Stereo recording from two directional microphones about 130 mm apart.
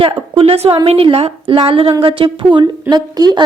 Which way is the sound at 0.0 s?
45° right (ahead or behind).